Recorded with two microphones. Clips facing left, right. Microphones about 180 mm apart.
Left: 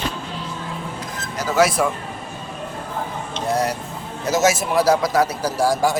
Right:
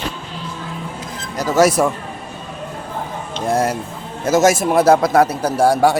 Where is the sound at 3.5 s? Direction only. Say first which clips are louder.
Right 4 dB; 50° right (ahead or behind).